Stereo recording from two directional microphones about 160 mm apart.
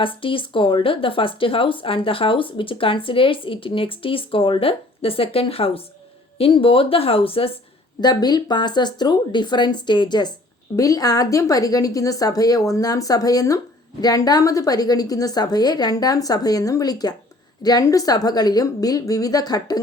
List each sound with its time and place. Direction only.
0.0 s speech: 35° left (ahead or behind)
8.0 s a woman's voice: 25° left (ahead or behind)